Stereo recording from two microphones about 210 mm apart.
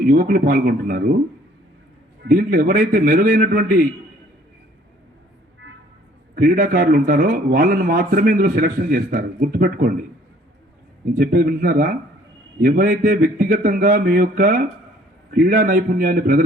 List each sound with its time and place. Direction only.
0.0 s a man's voice: 45° right (ahead or behind)
2.2 s a man's voice: 45° right (ahead or behind)
6.3 s a man's voice: 45° right (ahead or behind)
11.2 s a man's voice: 45° right (ahead or behind)